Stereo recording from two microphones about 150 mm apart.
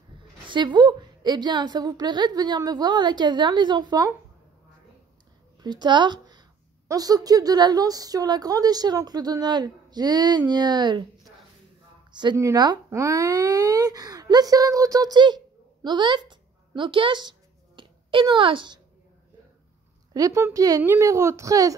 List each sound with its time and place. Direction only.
0.5 s a woman's voice: 30° right (ahead or behind)
5.6 s a woman's voice: 30° right (ahead or behind)
12.1 s speech: 30° right (ahead or behind)
20.2 s a woman's voice: 20° right (ahead or behind)